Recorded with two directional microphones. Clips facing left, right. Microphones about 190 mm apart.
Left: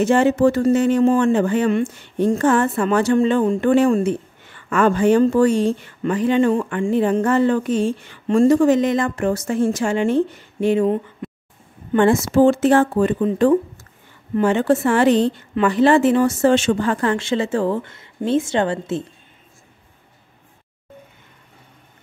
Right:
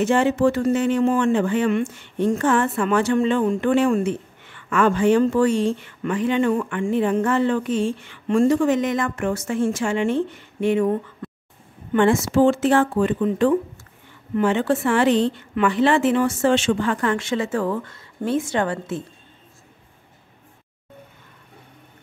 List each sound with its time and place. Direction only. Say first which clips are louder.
0.0 s speech: left 3 dB; 40° left (ahead or behind)
11.9 s speech: left 2 dB; 40° left (ahead or behind)